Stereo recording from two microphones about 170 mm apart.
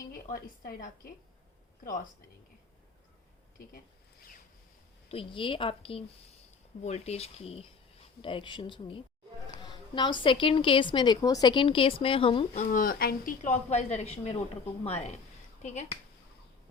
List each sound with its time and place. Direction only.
0.1 s a woman's voice: 55° left (ahead or behind)
5.1 s a woman's voice: 30° left (ahead or behind)
12.6 s a woman's voice: 55° left (ahead or behind)